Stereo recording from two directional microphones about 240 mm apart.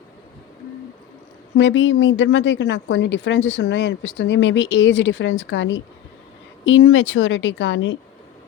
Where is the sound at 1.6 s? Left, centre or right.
Left.